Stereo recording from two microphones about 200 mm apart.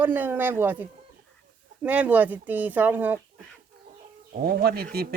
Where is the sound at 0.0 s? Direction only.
10° right (ahead or behind).